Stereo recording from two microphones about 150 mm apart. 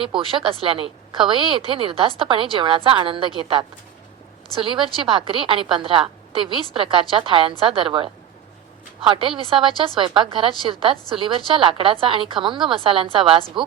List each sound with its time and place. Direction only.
0.0 s a woman's voice: 35° right (ahead or behind)